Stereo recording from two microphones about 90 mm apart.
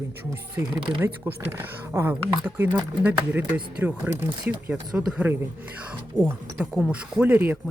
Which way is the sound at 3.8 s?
25° right (ahead or behind).